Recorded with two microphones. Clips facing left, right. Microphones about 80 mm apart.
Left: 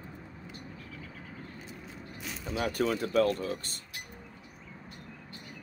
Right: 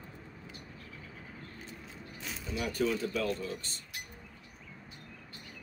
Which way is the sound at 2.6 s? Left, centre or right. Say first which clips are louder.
Left 2 dB; left.